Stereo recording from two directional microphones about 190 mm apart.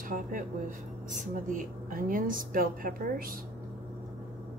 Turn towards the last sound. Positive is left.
turn(degrees=-50)  # may be behind; listen again after turning